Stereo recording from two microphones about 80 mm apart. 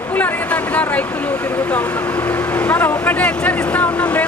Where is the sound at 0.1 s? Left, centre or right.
Left.